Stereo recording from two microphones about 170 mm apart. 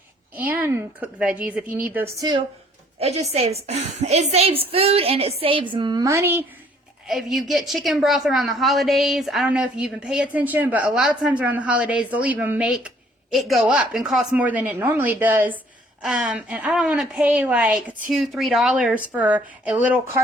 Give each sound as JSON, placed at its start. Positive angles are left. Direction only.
{"t": 0.3, "sound": "speech", "side_deg": -10}
{"t": 3.0, "sound": "a woman's voice", "side_deg": -40}
{"t": 7.1, "sound": "a woman's voice", "side_deg": 0}